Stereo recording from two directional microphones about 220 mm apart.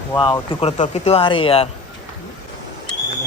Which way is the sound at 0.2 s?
20° left (ahead or behind).